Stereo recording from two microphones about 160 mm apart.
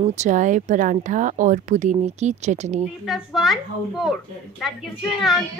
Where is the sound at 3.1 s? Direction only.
Centre (ahead or behind).